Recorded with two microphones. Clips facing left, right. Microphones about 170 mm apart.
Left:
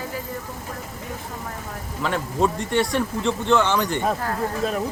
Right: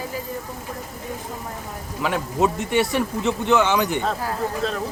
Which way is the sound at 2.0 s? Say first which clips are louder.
Right 1 dB; 10° right (ahead or behind).